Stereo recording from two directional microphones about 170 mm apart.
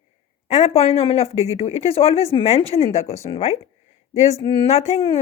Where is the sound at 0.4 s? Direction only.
40° left (ahead or behind).